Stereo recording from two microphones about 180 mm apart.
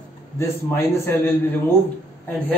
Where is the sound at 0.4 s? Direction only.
15° left (ahead or behind).